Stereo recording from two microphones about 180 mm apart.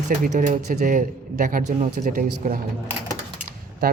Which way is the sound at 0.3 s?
45° right (ahead or behind).